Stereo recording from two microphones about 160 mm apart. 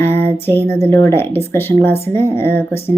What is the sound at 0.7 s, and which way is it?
Speech, 15° left (ahead or behind).